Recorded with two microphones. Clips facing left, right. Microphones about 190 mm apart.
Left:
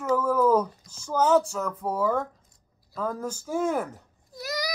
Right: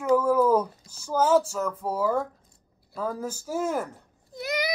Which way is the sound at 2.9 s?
5° right (ahead or behind).